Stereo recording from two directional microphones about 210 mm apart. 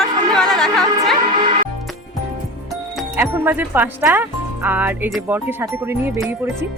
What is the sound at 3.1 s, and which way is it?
Speech, 10° right (ahead or behind).